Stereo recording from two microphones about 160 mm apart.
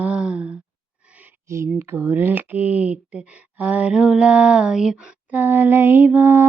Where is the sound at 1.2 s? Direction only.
15° right (ahead or behind).